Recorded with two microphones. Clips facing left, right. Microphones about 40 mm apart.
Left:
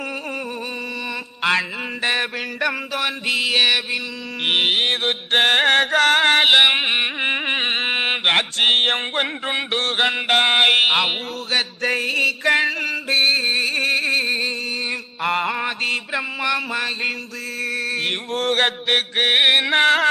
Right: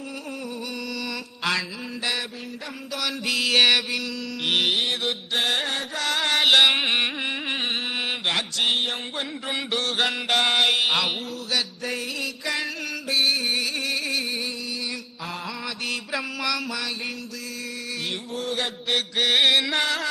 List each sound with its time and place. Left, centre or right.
1.4 s mantra: left
2.9 s mantra: left
4.4 s music: left
6.5 s carnatic music: left
7.2 s mantra: left
9.5 s mantra: left
11.5 s music: left
15.2 s music: left
16.1 s mantra: left
16.7 s music: left